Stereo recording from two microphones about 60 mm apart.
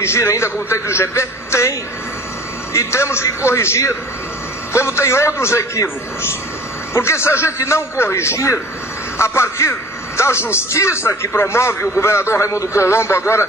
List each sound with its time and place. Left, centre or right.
0.0 s a man's voice: left